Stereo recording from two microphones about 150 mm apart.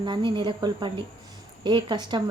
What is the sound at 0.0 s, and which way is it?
A woman's voice, 30° right (ahead or behind).